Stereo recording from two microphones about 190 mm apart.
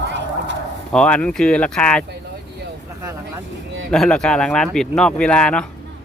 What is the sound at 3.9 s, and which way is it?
Speech, 5° left (ahead or behind).